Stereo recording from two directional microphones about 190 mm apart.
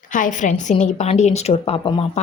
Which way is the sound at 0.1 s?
40° left (ahead or behind).